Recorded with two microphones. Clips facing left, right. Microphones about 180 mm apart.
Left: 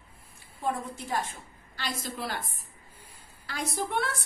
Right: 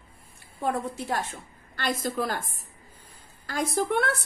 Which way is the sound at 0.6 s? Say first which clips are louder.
Right 4 dB; 70° right (ahead or behind).